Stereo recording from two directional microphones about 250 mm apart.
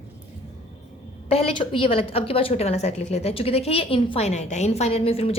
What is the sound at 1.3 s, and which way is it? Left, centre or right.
A woman's voice, left.